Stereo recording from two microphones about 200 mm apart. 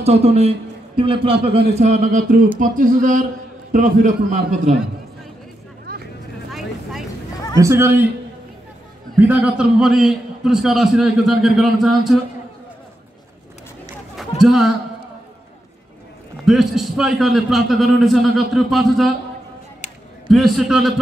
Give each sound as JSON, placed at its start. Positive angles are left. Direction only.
{"t": 0.0, "sound": "a man's voice", "side_deg": -30}
{"t": 6.5, "sound": "vehicle", "side_deg": 0}
{"t": 7.5, "sound": "a man's voice", "side_deg": -15}
{"t": 9.2, "sound": "a man's voice", "side_deg": -10}
{"t": 14.4, "sound": "a man's voice", "side_deg": 0}
{"t": 16.4, "sound": "a man's voice", "side_deg": 0}
{"t": 19.8, "sound": "a sound", "side_deg": 35}
{"t": 20.2, "sound": "a man's voice", "side_deg": 0}